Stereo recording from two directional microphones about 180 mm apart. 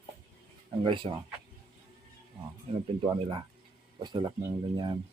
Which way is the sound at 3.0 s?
25° right (ahead or behind).